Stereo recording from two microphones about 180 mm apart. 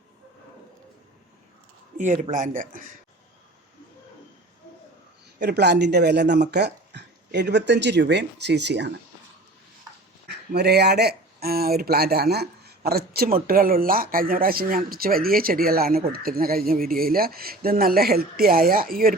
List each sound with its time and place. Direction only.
2.0 s speech: 45° right (ahead or behind)
5.4 s speech: 65° right (ahead or behind)
10.2 s speech: 65° right (ahead or behind)